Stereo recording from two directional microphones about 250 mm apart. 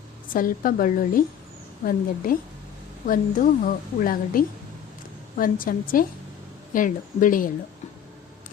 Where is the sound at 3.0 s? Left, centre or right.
Left.